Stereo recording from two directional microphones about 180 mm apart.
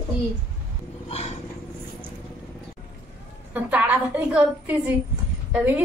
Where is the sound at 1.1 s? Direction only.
40° left (ahead or behind).